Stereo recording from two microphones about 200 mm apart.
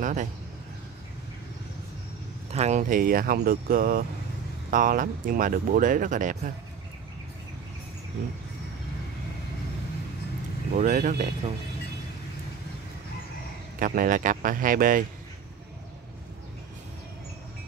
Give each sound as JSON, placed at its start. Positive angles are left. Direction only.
{"t": 0.0, "sound": "speech", "side_deg": -40}
{"t": 2.5, "sound": "speech", "side_deg": -35}
{"t": 10.8, "sound": "speech", "side_deg": -40}
{"t": 13.7, "sound": "speech", "side_deg": -45}